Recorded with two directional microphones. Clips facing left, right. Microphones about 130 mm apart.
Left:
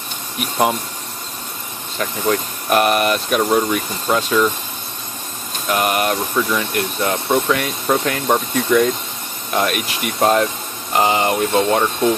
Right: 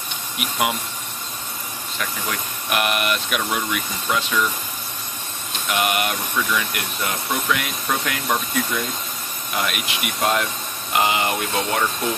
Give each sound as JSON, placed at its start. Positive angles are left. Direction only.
{"t": 0.4, "sound": "speech", "side_deg": 35}
{"t": 2.0, "sound": "speech", "side_deg": 35}
{"t": 5.7, "sound": "speech", "side_deg": 40}
{"t": 9.6, "sound": "speech", "side_deg": 40}